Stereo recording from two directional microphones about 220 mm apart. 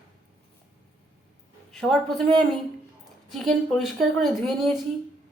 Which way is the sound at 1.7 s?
Centre (ahead or behind).